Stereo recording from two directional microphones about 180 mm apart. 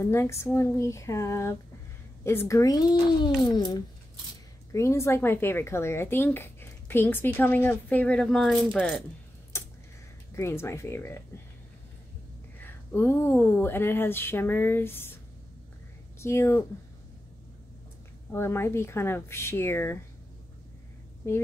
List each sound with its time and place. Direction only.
0.0 s speech: 15° left (ahead or behind)
4.7 s speech: 15° left (ahead or behind)
10.3 s speech: 15° left (ahead or behind)
12.5 s speech: 10° left (ahead or behind)
16.2 s speech: 15° left (ahead or behind)
18.3 s speech: 15° left (ahead or behind)
21.2 s speech: 15° left (ahead or behind)